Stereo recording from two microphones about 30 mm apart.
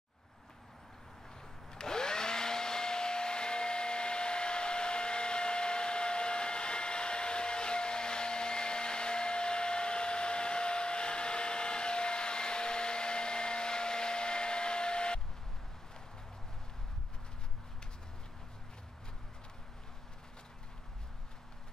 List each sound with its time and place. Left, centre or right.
1.7 s vacuum cleaner: left